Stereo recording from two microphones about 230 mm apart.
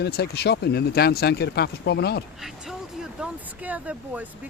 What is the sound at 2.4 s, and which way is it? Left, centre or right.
A man's voice, centre.